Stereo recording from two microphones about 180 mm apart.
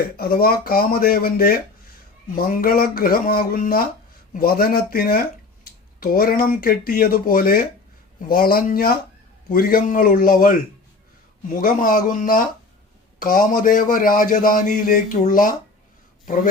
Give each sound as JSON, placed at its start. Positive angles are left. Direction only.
{"t": 0.2, "sound": "a man's voice", "side_deg": 55}